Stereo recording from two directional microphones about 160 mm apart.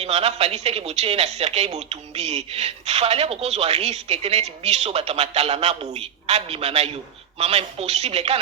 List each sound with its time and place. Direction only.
0.0 s speech: 40° right (ahead or behind)